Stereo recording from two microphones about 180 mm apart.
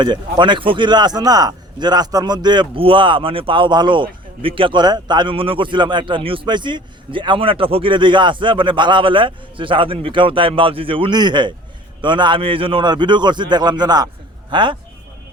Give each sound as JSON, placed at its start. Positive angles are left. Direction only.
{"t": 0.0, "sound": "a man's voice", "side_deg": -25}